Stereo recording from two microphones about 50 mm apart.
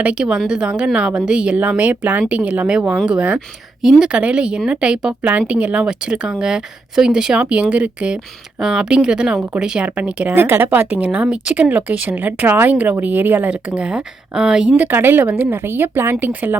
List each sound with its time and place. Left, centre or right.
0.0 s speech: centre
1.5 s speech: right
2.0 s speech: right
2.3 s speech: right
6.4 s speech: centre
7.3 s speech: right
9.8 s speech: right
10.3 s speech: right
10.8 s speech: right
13.5 s speech: right
14.9 s speech: right
15.2 s speech: right
16.2 s speech: right